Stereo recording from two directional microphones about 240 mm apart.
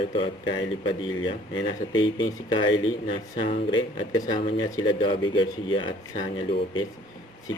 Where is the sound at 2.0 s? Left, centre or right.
Centre.